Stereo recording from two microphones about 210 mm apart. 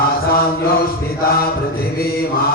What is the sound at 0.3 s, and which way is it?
Music, 45° left (ahead or behind).